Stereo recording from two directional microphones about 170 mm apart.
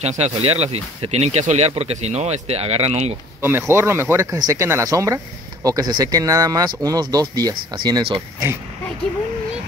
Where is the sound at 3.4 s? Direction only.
15° right (ahead or behind).